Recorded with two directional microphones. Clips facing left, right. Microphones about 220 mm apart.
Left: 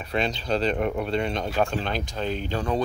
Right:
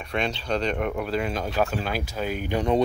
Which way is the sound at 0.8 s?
5° right (ahead or behind).